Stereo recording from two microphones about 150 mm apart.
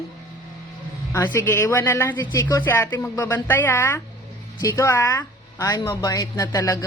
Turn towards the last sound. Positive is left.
turn(degrees=20)  # may be behind; listen again after turning